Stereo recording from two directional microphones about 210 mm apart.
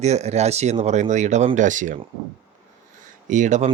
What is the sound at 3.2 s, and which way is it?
Speech, 35° right (ahead or behind).